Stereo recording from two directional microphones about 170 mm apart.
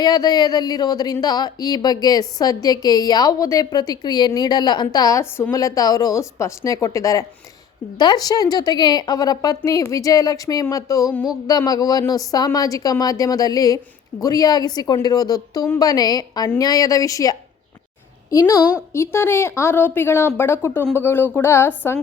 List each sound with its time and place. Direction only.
0.0 s a woman's voice: 25° left (ahead or behind)